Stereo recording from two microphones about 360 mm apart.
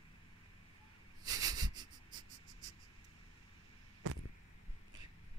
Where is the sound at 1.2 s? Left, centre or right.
Centre.